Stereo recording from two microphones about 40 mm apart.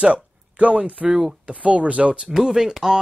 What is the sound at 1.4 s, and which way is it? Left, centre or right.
Speech, right.